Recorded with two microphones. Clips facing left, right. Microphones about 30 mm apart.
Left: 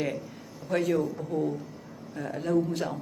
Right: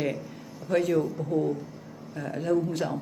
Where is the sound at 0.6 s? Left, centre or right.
Right.